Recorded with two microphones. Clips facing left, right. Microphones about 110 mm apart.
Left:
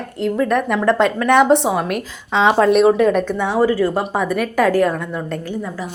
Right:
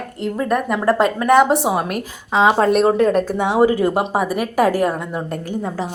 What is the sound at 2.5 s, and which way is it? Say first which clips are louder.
Speech: left 2 dB; 40° right (ahead or behind).